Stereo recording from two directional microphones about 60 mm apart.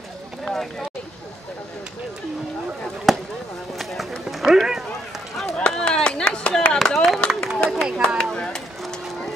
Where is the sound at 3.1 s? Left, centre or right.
Centre.